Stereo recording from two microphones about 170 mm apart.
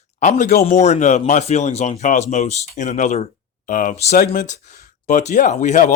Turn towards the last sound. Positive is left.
turn(degrees=45)  # may be behind; listen again after turning